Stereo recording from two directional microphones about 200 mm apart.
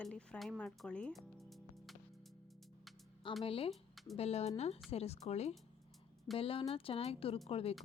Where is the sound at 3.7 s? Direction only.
Centre (ahead or behind).